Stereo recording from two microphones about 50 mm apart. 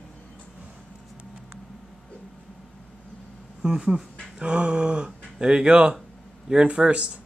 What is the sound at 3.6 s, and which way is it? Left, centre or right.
A man's voice, centre.